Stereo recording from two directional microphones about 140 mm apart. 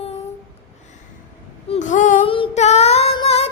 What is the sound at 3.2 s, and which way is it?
Music, 45° left (ahead or behind).